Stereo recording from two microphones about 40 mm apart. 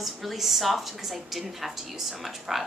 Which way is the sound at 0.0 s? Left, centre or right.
Centre.